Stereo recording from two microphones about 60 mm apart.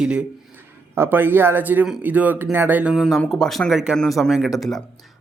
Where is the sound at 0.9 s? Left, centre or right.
Right.